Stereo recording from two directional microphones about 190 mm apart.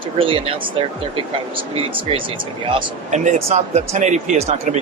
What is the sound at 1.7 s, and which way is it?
Speech, 30° right (ahead or behind).